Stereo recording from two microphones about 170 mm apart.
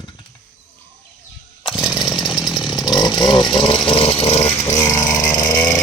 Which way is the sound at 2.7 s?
25° left (ahead or behind).